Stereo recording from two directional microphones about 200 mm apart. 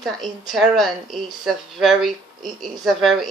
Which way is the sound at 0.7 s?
Centre (ahead or behind).